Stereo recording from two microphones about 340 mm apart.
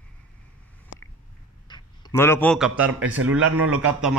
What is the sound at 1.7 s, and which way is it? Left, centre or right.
A man's voice, centre.